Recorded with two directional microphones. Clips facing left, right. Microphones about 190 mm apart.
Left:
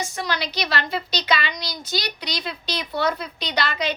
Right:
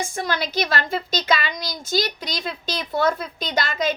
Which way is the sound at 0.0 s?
50° right (ahead or behind).